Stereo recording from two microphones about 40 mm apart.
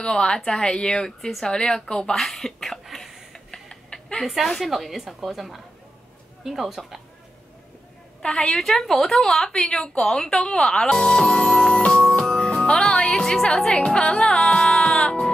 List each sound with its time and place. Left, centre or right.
0.0 s speech: centre
2.1 s a sound: centre
3.3 s a sound: centre
4.2 s a woman's voice: centre
8.2 s speech: centre
11.4 s music: left
12.1 s speech: left
14.2 s music: left